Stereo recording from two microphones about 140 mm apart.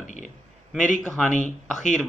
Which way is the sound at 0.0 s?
60° left (ahead or behind).